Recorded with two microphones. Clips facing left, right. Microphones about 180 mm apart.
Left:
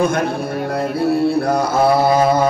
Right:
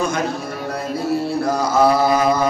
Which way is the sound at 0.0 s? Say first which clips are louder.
Left 4 dB; 55° left (ahead or behind).